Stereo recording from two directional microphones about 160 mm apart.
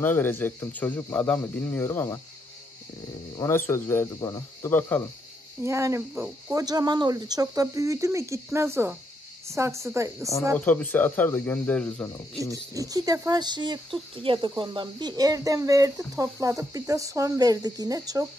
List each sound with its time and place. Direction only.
0.0 s speech: 15° left (ahead or behind)
3.3 s speech: 15° left (ahead or behind)
5.6 s speech: 20° right (ahead or behind)
10.6 s speech: 10° left (ahead or behind)
12.7 s speech: 20° right (ahead or behind)